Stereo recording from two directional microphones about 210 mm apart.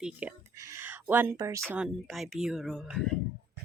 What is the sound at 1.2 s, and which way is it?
Speech, 15° right (ahead or behind).